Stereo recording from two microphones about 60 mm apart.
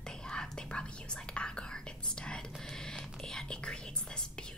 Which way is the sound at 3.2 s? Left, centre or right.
Centre.